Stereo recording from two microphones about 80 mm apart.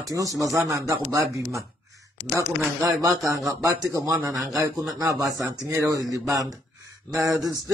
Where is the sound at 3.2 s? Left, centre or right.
Centre.